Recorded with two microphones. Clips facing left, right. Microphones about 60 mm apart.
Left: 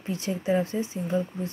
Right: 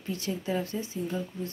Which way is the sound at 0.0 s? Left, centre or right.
Left.